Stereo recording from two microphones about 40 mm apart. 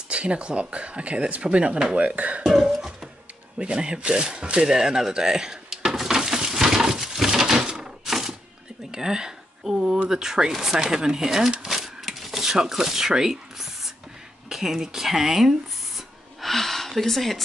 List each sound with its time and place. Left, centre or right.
0.1 s speech: right
2.4 s cough: centre
3.5 s a sound: right; by 8.4 s centre
8.9 s speech: centre
11.6 s a sound: centre
12.4 s speech: centre
16.3 s speech: centre